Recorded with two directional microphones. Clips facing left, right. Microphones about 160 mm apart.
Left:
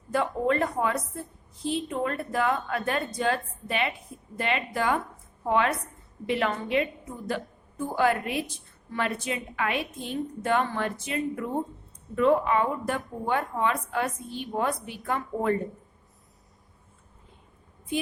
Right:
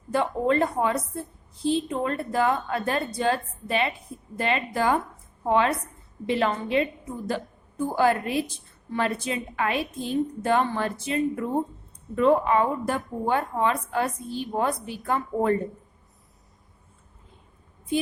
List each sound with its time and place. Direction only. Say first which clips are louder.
0.1 s a woman's voice: right 2 dB; 30° right (ahead or behind)
7.9 s a woman's voice: right 2 dB; 35° right (ahead or behind)